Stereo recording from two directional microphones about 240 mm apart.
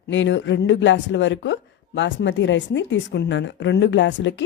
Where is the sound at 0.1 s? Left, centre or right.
Left.